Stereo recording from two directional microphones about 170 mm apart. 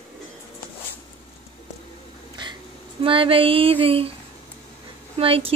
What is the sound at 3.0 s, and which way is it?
A woman's voice, 30° right (ahead or behind).